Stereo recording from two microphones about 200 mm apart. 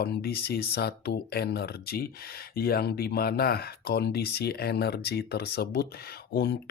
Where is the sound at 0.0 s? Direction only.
50° left (ahead or behind).